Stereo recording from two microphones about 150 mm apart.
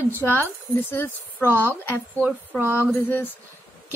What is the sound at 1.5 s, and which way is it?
Speech, 15° right (ahead or behind).